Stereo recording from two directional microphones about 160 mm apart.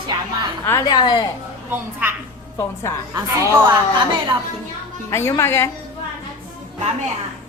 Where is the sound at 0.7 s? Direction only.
20° left (ahead or behind).